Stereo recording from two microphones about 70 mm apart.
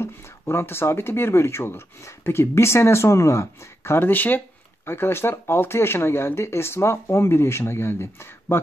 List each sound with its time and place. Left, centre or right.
0.0 s speech: left